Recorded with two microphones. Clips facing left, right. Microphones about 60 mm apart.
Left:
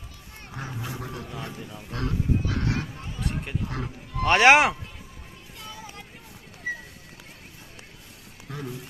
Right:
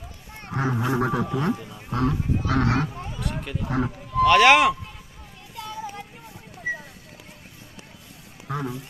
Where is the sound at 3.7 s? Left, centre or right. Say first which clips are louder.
Right 8 dB; right.